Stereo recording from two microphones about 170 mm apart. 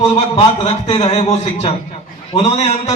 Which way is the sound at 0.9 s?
40° left (ahead or behind).